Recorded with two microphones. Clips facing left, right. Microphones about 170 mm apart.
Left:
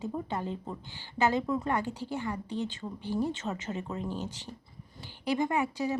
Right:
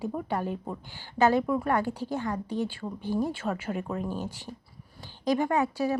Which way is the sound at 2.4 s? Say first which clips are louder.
Right 3 dB; 15° right (ahead or behind).